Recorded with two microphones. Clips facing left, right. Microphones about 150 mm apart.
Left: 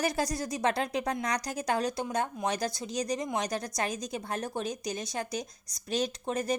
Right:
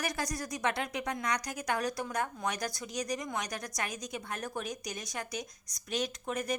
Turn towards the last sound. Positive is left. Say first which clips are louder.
# left 4 dB
turn(degrees=30)  # may be behind; listen again after turning